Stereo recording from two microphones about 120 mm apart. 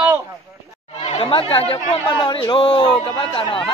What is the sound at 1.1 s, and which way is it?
Speech, 50° left (ahead or behind).